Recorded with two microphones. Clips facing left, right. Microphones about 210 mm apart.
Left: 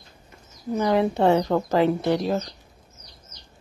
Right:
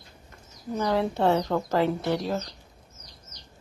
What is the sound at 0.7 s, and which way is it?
Speech, 15° left (ahead or behind).